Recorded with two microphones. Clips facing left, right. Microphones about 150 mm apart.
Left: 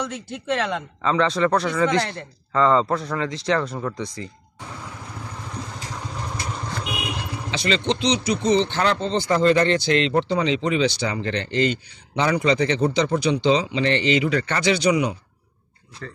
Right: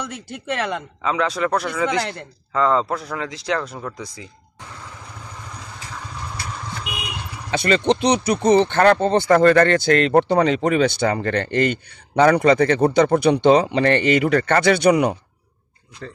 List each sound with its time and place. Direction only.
0.1 s a man's voice: 5° right (ahead or behind)
7.5 s speech: 55° right (ahead or behind)